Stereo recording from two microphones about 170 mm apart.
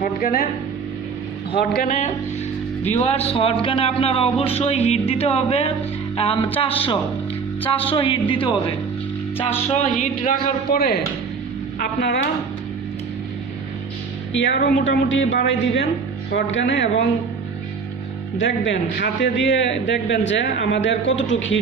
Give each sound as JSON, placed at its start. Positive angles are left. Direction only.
{"t": 0.0, "sound": "speech", "side_deg": 60}
{"t": 1.8, "sound": "speech", "side_deg": 50}
{"t": 11.8, "sound": "speech", "side_deg": 90}
{"t": 14.3, "sound": "a woman's voice", "side_deg": 90}
{"t": 18.4, "sound": "speech", "side_deg": 90}